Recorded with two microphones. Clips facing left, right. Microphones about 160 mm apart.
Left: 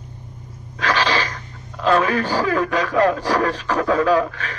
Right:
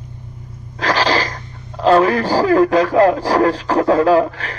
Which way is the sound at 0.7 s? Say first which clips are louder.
Right 3 dB; 35° right (ahead or behind).